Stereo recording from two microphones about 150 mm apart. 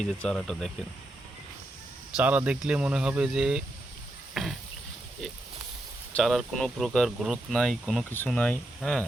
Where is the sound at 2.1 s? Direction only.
10° right (ahead or behind).